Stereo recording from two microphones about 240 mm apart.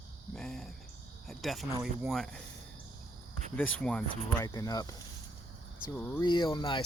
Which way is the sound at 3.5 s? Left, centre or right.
Centre.